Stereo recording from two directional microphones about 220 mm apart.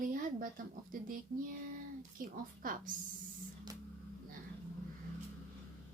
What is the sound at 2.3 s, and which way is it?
Speech, 40° right (ahead or behind).